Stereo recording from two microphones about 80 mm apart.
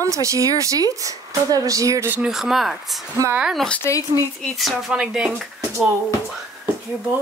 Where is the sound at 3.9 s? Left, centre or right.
Left.